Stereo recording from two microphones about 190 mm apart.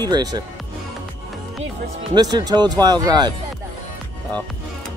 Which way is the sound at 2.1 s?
20° right (ahead or behind).